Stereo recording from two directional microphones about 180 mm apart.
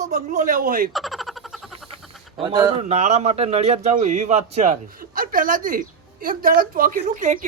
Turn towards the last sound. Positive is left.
turn(degrees=-45)  # may be behind; listen again after turning